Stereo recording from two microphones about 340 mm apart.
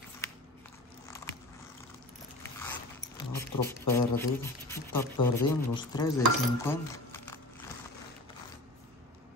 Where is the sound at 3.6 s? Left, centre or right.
Centre.